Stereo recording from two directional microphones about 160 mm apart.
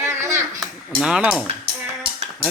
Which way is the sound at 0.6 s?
5° right (ahead or behind).